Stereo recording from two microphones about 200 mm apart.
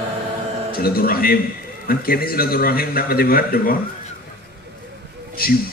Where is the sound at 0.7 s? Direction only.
50° left (ahead or behind).